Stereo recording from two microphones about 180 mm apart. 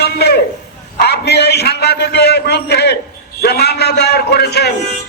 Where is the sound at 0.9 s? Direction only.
65° left (ahead or behind).